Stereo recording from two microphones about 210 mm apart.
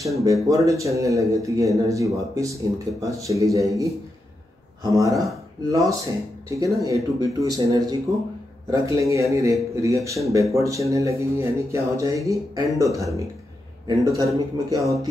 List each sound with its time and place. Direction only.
0.2 s a man's voice: 15° right (ahead or behind)